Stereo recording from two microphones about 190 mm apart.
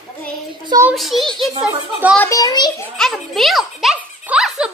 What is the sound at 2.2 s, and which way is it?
Speech, 20° left (ahead or behind).